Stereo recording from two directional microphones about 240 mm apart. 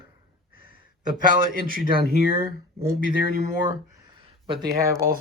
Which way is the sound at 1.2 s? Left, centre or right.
Right.